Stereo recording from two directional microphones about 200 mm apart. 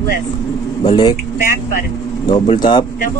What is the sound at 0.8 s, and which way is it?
Speech, 20° left (ahead or behind).